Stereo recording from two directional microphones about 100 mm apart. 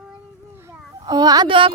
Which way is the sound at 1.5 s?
60° right (ahead or behind).